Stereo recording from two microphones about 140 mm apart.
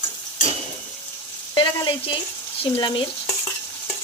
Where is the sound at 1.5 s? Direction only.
35° left (ahead or behind).